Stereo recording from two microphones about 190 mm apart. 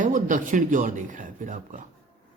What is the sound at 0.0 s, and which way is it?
Speech, 45° right (ahead or behind).